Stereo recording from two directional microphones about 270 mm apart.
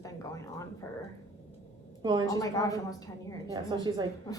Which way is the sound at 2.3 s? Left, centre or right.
Centre.